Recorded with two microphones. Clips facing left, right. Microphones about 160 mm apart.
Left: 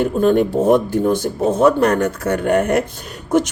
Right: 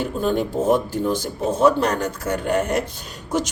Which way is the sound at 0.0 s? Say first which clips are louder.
Left 7 dB; 55° left (ahead or behind).